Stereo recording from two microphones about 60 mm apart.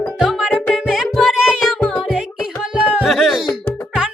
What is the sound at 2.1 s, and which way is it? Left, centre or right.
Music, centre.